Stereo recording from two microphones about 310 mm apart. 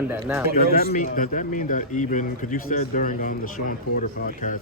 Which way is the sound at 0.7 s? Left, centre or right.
Left.